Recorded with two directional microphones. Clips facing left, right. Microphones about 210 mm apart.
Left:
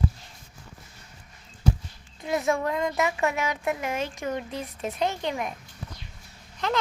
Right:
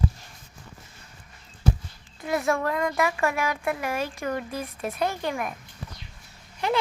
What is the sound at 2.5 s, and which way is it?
Speech, 20° left (ahead or behind).